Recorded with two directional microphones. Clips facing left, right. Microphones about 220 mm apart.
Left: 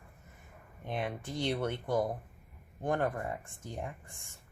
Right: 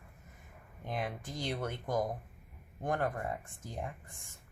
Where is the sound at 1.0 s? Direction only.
30° left (ahead or behind).